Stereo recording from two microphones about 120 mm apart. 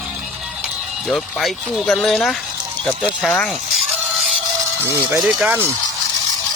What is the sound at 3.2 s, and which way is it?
Speech, 10° left (ahead or behind).